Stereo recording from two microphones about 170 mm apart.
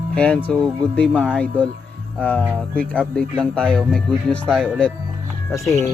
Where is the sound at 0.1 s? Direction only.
5° left (ahead or behind).